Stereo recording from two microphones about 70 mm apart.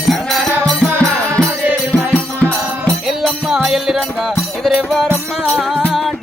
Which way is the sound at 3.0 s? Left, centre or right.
Centre.